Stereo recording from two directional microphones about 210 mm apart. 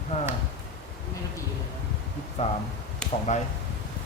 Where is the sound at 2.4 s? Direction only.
35° left (ahead or behind).